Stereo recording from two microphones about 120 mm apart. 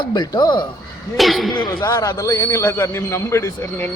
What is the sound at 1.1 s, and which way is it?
Speech, centre (ahead or behind).